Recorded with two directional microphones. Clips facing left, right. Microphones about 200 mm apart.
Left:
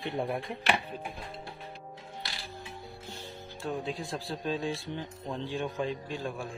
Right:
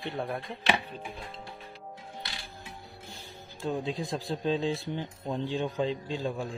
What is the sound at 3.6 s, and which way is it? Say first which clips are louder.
Speech: right 3 dB; 15° right (ahead or behind).